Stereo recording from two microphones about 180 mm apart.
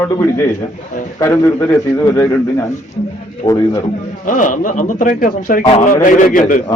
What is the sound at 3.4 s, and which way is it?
Speech, 20° left (ahead or behind).